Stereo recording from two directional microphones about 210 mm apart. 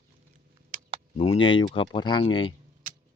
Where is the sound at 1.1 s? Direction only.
25° left (ahead or behind).